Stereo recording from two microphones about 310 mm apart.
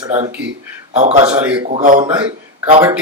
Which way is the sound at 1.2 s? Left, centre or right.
Centre.